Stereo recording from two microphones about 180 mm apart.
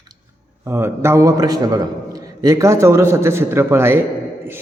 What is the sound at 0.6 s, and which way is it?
A man's voice, 15° right (ahead or behind).